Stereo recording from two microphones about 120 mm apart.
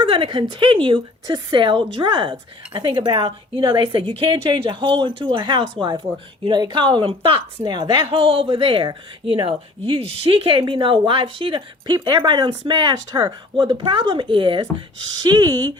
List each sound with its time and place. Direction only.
0.0 s speech: 45° right (ahead or behind)